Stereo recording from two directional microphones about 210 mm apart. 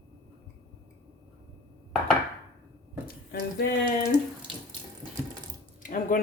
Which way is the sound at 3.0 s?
50° left (ahead or behind).